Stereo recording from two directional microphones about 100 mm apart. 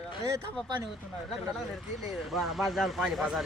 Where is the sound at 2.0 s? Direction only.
Centre (ahead or behind).